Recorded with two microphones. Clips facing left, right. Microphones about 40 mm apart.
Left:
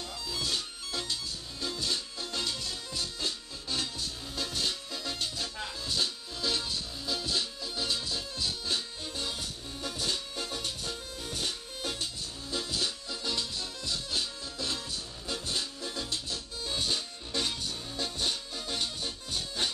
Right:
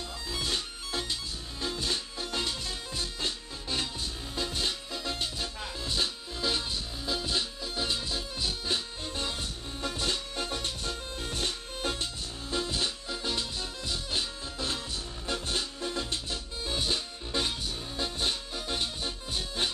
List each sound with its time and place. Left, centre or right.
0.3 s music: right
16.6 s music: centre